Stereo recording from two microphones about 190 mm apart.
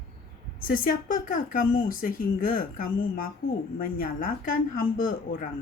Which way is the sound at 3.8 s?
45° left (ahead or behind).